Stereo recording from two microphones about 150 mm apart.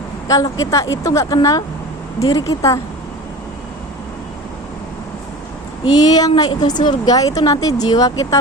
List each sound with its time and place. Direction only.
0.3 s a woman's voice: 25° left (ahead or behind)
5.8 s a woman's voice: 25° left (ahead or behind)